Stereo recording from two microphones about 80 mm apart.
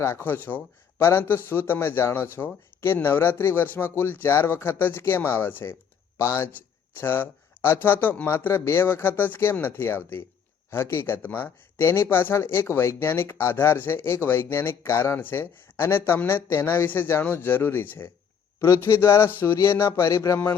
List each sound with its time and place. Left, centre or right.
0.0 s speech: left